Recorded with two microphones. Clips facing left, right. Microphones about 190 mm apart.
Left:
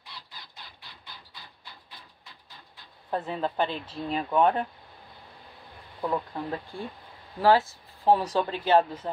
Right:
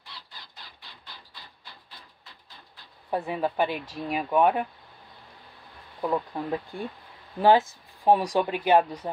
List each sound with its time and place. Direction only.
3.1 s speech: 10° right (ahead or behind)
5.9 s speech: 10° right (ahead or behind)